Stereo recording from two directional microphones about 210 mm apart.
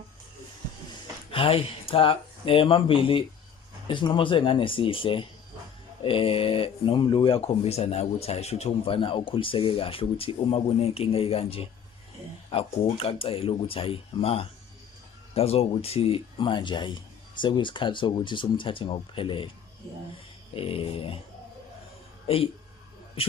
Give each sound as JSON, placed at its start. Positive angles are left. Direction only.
{"t": 1.3, "sound": "speech", "side_deg": 25}
{"t": 20.5, "sound": "speech", "side_deg": 25}
{"t": 22.3, "sound": "speech", "side_deg": 25}